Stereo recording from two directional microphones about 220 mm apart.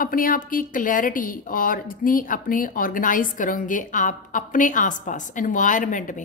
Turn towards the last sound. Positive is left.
turn(degrees=35)  # may be behind; listen again after turning